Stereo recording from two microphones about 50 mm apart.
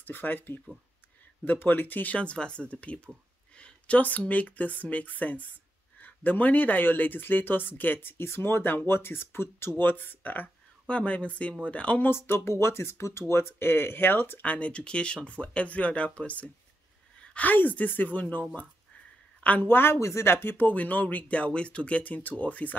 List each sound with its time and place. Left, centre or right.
0.0 s speech: left
10.9 s speech: left
12.1 s speech: left
13.3 s speech: left
14.4 s speech: left
17.2 s a sound: left
17.5 s speech: left
19.4 s speech: left
19.7 s speech: left
20.0 s speech: left
20.2 s speech: left